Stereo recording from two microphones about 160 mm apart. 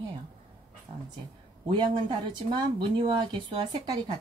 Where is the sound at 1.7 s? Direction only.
30° right (ahead or behind).